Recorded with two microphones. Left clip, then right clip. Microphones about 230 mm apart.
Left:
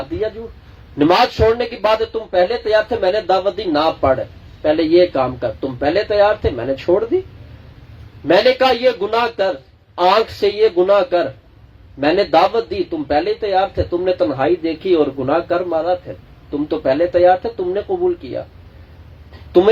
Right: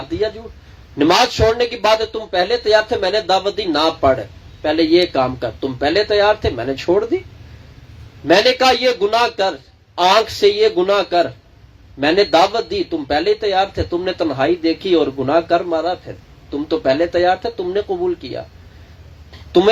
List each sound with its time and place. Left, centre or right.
0.9 s speech: right
8.3 s speech: right